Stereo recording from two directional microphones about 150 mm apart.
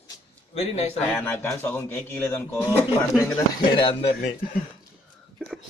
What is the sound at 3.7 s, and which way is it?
Speech, 35° left (ahead or behind).